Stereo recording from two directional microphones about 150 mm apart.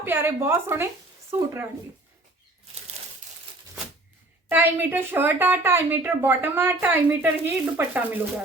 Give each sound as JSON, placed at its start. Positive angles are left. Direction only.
{"t": 0.0, "sound": "a woman's voice", "side_deg": -15}
{"t": 4.4, "sound": "a woman's voice", "side_deg": -15}